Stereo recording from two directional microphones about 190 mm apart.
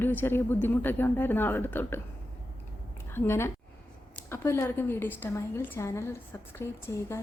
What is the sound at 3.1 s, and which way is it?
A woman's voice, 10° left (ahead or behind).